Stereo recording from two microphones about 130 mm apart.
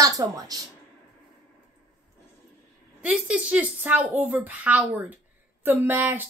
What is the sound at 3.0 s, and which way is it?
A woman's voice, 10° right (ahead or behind).